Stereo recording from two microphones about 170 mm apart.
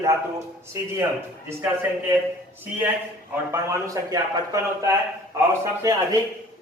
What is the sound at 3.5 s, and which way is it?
A man's voice, 20° right (ahead or behind).